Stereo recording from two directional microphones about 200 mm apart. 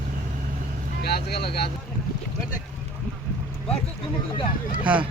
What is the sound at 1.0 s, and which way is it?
Speech, 55° left (ahead or behind).